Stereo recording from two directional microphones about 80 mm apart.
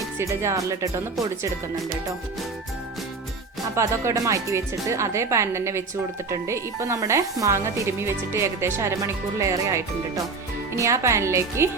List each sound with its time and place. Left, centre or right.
0.2 s speech: right
3.8 s speech: right